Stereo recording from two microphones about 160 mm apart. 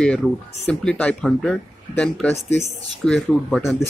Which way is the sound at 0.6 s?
5° left (ahead or behind).